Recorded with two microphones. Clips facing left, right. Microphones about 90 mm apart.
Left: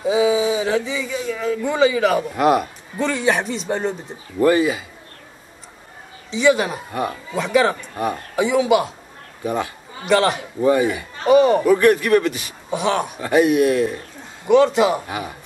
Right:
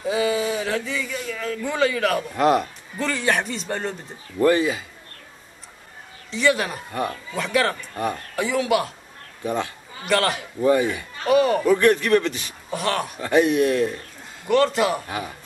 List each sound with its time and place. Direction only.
0.0 s speech: 5° left (ahead or behind)
3.0 s a man's voice: 5° left (ahead or behind)
6.3 s a man's voice: centre (ahead or behind)
6.9 s a man's voice: 15° left (ahead or behind)
7.3 s a man's voice: 5° left (ahead or behind)
7.7 s a man's voice: 15° left (ahead or behind)
10.0 s a man's voice: centre (ahead or behind)
10.6 s a man's voice: 15° left (ahead or behind)
11.2 s a man's voice: centre (ahead or behind)
11.7 s a man's voice: 15° left (ahead or behind)
12.7 s a man's voice: centre (ahead or behind)
13.2 s a man's voice: 10° left (ahead or behind)
14.4 s a man's voice: centre (ahead or behind)
15.0 s a man's voice: 15° left (ahead or behind)